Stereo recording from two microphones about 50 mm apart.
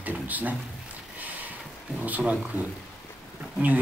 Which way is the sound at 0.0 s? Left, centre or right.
Right.